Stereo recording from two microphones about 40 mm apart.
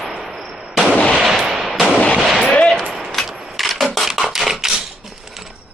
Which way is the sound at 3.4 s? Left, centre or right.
Centre.